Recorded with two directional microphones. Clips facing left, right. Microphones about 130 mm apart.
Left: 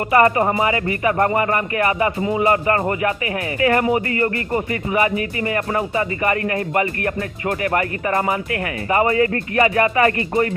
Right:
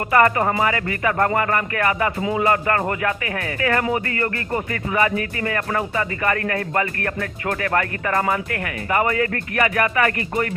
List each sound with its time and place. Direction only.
0.1 s speech: 20° left (ahead or behind)